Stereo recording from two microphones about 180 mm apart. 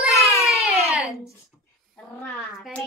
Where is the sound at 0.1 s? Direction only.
15° left (ahead or behind).